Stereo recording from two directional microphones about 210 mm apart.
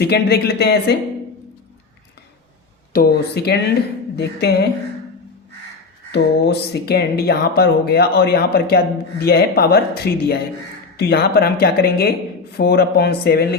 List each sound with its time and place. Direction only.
0.0 s speech: 50° left (ahead or behind)
2.9 s speech: 45° left (ahead or behind)
6.1 s speech: 50° left (ahead or behind)